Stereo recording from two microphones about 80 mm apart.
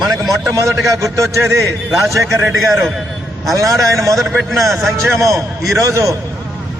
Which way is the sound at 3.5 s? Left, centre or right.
Right.